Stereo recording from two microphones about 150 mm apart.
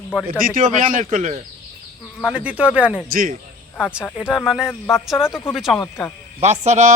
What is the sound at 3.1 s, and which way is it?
Speech, 70° right (ahead or behind).